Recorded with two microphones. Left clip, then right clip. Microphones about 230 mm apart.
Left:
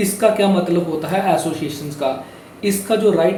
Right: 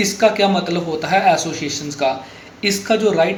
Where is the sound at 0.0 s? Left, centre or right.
Centre.